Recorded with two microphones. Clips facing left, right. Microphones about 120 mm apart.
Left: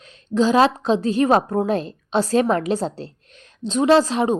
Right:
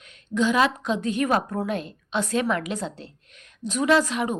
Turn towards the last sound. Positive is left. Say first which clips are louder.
# left 5 dB
turn(degrees=30)  # may be behind; listen again after turning